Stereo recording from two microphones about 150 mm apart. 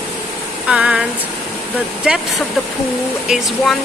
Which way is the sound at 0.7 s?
5° right (ahead or behind).